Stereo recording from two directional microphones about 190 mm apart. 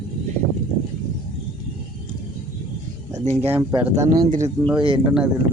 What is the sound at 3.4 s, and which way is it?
Speech, 15° right (ahead or behind).